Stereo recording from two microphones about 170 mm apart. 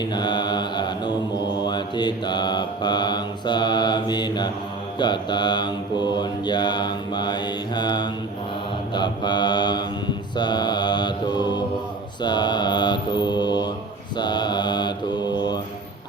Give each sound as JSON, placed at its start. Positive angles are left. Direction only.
{"t": 0.0, "sound": "mantra", "side_deg": 25}